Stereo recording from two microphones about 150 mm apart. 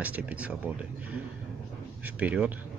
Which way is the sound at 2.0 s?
10° right (ahead or behind).